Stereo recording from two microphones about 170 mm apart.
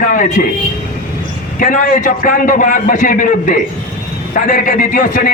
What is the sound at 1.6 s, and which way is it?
A man's voice, 55° left (ahead or behind).